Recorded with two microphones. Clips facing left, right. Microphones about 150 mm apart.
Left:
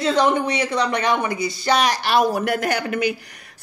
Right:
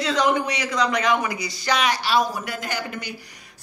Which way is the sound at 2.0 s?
55° left (ahead or behind).